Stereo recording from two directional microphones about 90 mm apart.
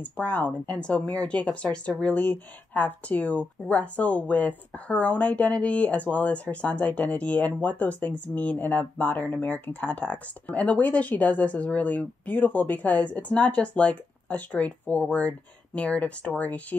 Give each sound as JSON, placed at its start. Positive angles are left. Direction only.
{"t": 0.0, "sound": "speech", "side_deg": 15}